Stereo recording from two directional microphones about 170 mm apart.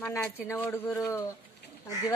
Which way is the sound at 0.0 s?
10° left (ahead or behind).